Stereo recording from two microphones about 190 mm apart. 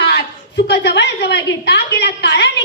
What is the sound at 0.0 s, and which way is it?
A woman's voice, 65° left (ahead or behind).